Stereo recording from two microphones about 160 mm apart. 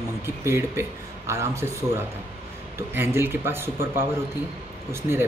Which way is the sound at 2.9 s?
15° right (ahead or behind).